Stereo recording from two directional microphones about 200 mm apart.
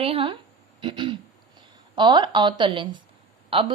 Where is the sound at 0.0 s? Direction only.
30° right (ahead or behind).